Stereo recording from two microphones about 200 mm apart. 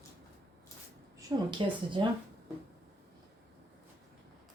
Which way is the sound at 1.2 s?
25° right (ahead or behind).